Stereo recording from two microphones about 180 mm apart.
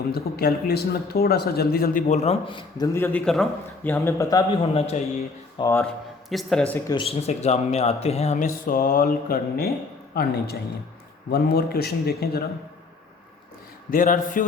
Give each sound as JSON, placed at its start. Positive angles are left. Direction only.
{"t": 0.1, "sound": "speech", "side_deg": 60}
{"t": 4.7, "sound": "speech", "side_deg": 35}
{"t": 5.5, "sound": "speech", "side_deg": 15}
{"t": 6.3, "sound": "speech", "side_deg": 5}
{"t": 6.8, "sound": "speech", "side_deg": 30}
{"t": 8.6, "sound": "speech", "side_deg": 50}
{"t": 13.9, "sound": "speech", "side_deg": 50}